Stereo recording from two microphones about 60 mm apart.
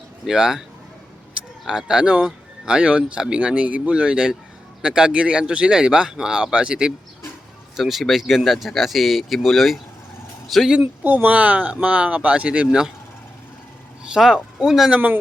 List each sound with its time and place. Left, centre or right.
0.3 s speech: centre
7.8 s speech: centre
10.7 s speech: right
14.0 s speech: centre